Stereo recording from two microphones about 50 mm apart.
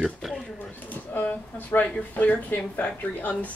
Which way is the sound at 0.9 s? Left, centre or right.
Left.